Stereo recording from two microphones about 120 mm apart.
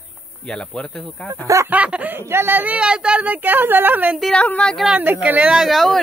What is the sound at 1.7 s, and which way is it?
Speech, 10° right (ahead or behind).